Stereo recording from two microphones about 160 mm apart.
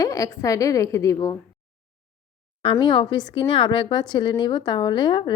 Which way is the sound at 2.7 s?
30° left (ahead or behind).